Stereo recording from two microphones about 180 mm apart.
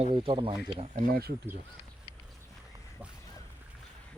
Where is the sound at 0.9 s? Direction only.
50° right (ahead or behind).